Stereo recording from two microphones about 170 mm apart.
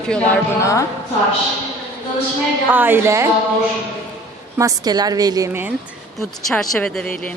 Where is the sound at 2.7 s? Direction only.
10° right (ahead or behind).